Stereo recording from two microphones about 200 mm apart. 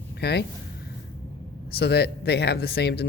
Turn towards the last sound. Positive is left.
turn(degrees=55)  # may be behind; listen again after turning